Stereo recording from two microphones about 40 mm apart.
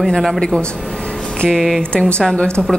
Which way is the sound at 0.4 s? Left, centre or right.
Centre.